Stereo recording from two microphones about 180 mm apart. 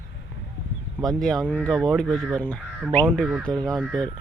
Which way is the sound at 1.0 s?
Centre (ahead or behind).